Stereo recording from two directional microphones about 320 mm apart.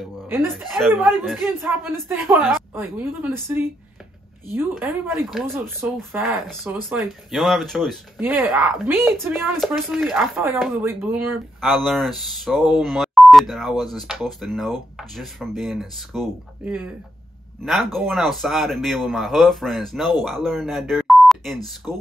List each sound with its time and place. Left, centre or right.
0.3 s speech: centre